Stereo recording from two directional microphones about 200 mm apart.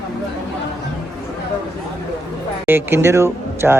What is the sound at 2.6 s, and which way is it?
Speech, 10° right (ahead or behind).